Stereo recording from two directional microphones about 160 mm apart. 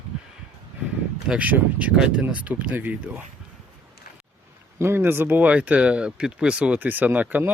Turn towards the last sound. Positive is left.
turn(degrees=-10)  # may be behind; listen again after turning